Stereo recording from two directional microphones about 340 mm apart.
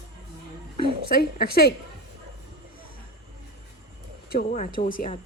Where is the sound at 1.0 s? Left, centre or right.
Left.